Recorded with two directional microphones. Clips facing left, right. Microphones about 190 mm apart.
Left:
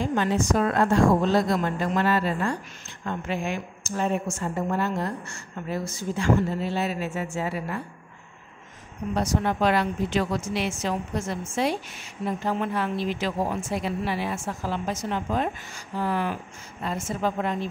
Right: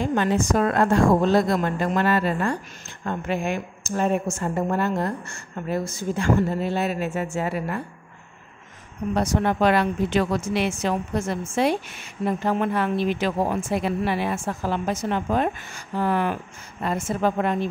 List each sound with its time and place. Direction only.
0.1 s a woman's voice: 55° right (ahead or behind)
9.1 s a woman's voice: 60° right (ahead or behind)